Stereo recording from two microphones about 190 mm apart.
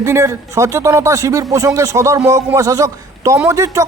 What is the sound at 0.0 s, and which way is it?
A man's voice, 15° right (ahead or behind).